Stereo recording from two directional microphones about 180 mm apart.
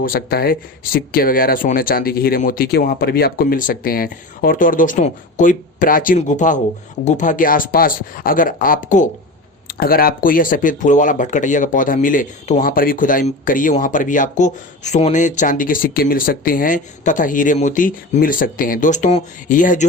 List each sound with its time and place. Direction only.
0.0 s speech: 60° left (ahead or behind)
9.6 s speech: 55° left (ahead or behind)